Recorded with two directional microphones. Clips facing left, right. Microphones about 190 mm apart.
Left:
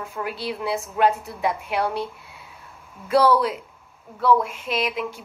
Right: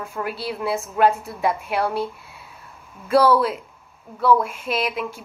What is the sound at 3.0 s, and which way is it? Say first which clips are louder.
A woman's voice: right 1 dB; 20° left (ahead or behind).